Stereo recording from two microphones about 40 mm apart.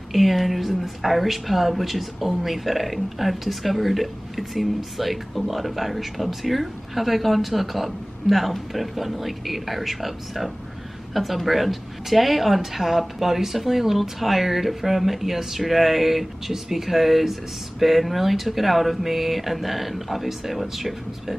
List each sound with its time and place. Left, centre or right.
0.1 s a woman's voice: centre